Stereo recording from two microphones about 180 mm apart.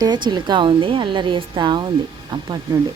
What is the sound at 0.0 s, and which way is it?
A woman's voice, 25° right (ahead or behind).